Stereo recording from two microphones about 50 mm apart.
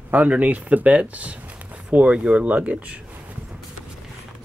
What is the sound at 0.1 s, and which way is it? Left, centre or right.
Speech, right.